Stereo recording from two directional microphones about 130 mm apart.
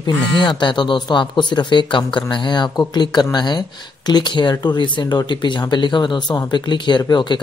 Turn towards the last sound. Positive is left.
turn(degrees=35)  # may be behind; listen again after turning